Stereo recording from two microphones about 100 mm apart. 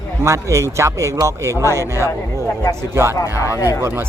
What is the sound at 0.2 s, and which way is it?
Speech, 30° right (ahead or behind).